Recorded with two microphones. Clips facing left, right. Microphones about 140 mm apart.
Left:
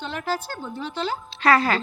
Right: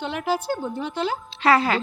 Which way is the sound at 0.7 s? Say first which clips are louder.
Right 2 dB; 55° right (ahead or behind).